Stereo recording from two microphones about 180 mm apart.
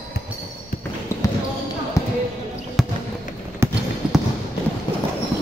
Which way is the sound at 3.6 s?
15° right (ahead or behind).